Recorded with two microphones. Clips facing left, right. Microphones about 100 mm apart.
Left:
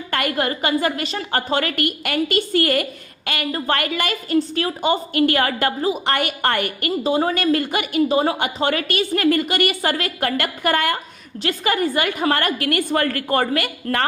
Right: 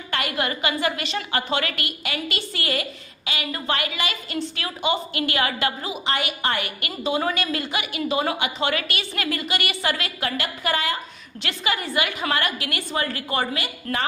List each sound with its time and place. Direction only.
0.1 s a woman's voice: 50° left (ahead or behind)
7.0 s a woman's voice: 35° left (ahead or behind); by 11.0 s 55° left (ahead or behind)
11.4 s a woman's voice: 45° left (ahead or behind)